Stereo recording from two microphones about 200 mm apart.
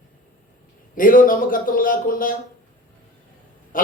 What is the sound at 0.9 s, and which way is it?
A man's voice, 45° left (ahead or behind).